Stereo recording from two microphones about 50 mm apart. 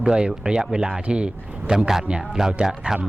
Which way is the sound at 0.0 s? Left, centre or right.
Centre.